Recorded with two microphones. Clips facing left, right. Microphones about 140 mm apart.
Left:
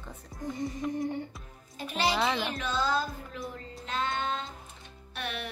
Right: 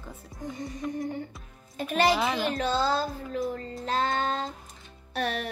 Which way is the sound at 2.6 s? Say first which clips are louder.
Right 4 dB; 35° right (ahead or behind).